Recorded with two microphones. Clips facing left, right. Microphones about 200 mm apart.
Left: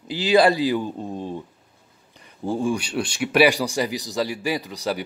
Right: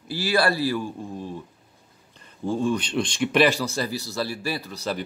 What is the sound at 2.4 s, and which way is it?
Speech, 10° left (ahead or behind).